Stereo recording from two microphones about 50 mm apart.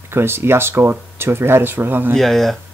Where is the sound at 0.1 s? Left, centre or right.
Right.